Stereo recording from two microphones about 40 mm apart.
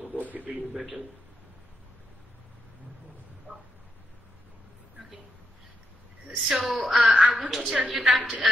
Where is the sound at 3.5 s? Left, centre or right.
Right.